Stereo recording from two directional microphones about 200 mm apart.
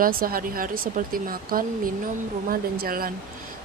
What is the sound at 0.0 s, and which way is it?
Speech, 45° right (ahead or behind).